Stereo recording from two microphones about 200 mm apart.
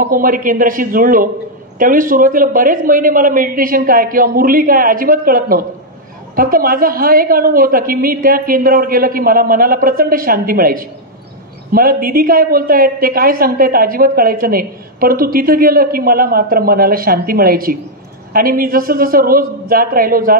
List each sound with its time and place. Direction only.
0.0 s a woman's voice: 45° right (ahead or behind)